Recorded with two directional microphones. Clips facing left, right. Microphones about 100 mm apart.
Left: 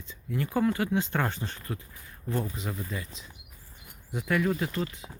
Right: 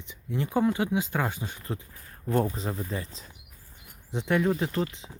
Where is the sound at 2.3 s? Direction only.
50° right (ahead or behind).